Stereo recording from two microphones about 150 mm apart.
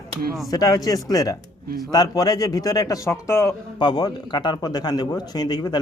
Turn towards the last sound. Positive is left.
turn(degrees=25)  # may be behind; listen again after turning